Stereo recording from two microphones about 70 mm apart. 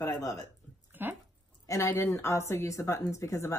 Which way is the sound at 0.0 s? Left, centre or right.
Left.